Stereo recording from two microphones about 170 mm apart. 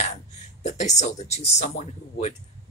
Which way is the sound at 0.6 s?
45° left (ahead or behind).